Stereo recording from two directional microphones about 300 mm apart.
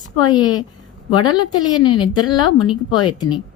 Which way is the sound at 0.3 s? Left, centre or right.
Centre.